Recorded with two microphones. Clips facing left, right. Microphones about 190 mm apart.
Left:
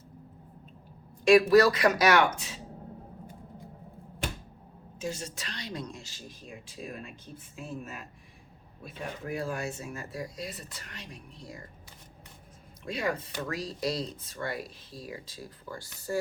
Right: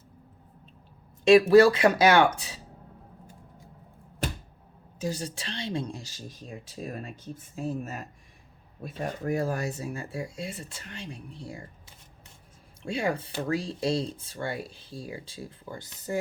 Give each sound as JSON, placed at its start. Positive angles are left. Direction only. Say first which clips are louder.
{"t": 1.2, "sound": "speech", "louder": "right 3 dB", "side_deg": -25}
{"t": 4.9, "sound": "a woman's voice", "louder": "right 4 dB", "side_deg": -35}
{"t": 12.8, "sound": "speech", "louder": "right 3 dB", "side_deg": -30}